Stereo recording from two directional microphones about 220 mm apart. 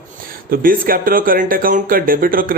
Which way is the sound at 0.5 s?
40° right (ahead or behind).